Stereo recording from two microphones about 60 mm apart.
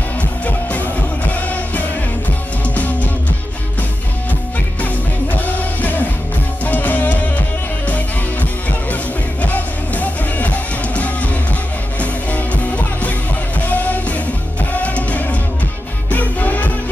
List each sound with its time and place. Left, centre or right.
0.5 s music: left
4.8 s music: left